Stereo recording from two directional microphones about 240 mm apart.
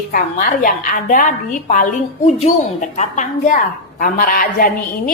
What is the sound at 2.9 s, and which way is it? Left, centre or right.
Speech, left.